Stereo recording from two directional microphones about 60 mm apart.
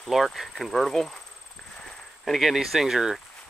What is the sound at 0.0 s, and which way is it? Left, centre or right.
Speech, centre.